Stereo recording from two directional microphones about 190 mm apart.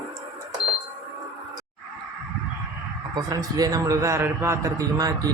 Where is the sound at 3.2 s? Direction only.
20° right (ahead or behind).